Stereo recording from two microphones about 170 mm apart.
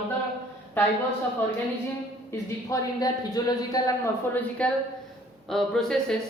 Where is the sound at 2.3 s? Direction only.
20° left (ahead or behind).